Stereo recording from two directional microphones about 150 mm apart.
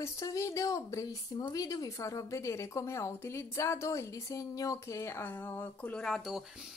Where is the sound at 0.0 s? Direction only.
20° left (ahead or behind).